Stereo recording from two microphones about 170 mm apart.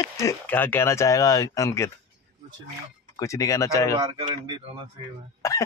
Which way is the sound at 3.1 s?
20° left (ahead or behind).